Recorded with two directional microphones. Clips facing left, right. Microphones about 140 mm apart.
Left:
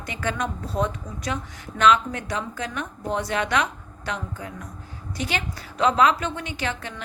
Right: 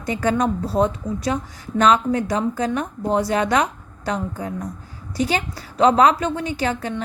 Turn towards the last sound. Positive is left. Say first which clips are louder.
# right 7 dB
turn(degrees=-35)  # may be behind; listen again after turning